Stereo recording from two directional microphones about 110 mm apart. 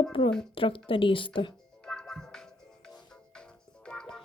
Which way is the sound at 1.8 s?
5° left (ahead or behind).